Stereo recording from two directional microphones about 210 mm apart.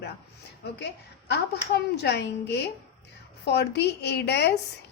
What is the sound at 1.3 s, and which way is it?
A woman's voice, 50° left (ahead or behind).